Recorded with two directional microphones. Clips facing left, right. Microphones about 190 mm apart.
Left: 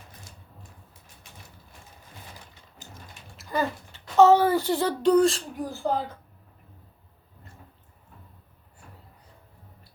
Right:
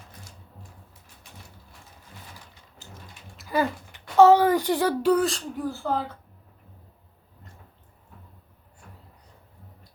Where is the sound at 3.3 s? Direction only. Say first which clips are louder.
Right 2 dB; 10° right (ahead or behind).